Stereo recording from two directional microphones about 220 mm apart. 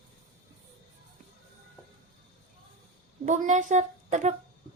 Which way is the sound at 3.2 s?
35° right (ahead or behind).